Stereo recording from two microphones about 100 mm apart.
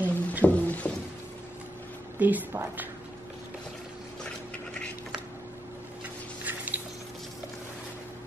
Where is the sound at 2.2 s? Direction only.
20° right (ahead or behind).